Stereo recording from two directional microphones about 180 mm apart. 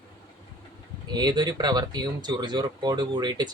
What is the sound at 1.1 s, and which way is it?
Speech, 25° right (ahead or behind).